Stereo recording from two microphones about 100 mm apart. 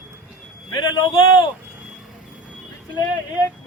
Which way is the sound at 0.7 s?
45° left (ahead or behind).